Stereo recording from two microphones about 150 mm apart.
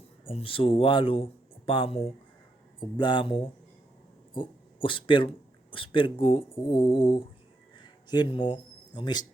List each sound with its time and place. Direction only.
0.3 s speech: 40° left (ahead or behind)